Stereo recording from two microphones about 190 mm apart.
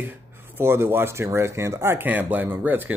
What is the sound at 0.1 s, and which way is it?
Speech, 10° right (ahead or behind).